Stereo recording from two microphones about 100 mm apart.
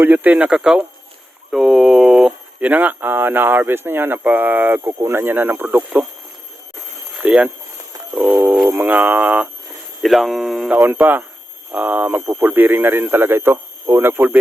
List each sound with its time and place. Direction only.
0.0 s a man's voice: 15° right (ahead or behind)
7.2 s a man's voice: 10° right (ahead or behind)
10.0 s speech: centre (ahead or behind)
10.8 s a man's voice: 20° right (ahead or behind)
12.2 s speech: 30° right (ahead or behind)
12.5 s a man's voice: 20° right (ahead or behind)